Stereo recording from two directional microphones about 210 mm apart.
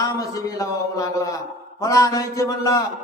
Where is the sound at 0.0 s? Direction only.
15° left (ahead or behind).